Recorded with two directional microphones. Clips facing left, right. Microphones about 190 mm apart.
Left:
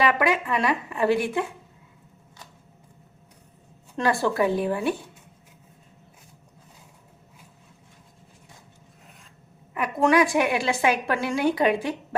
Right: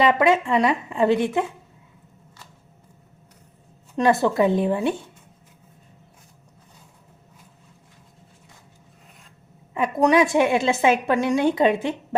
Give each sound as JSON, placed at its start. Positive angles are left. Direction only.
{"t": 0.0, "sound": "a woman's voice", "side_deg": -25}
{"t": 3.9, "sound": "a woman's voice", "side_deg": -20}
{"t": 9.7, "sound": "a woman's voice", "side_deg": -25}